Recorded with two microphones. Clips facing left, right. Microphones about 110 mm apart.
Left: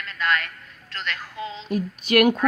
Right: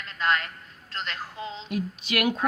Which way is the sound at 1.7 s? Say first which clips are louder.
Left 7 dB; 45° left (ahead or behind).